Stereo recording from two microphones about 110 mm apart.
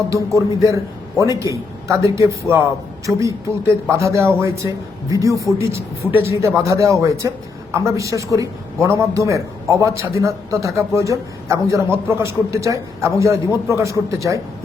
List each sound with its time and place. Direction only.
0.1 s a man's voice: 30° right (ahead or behind)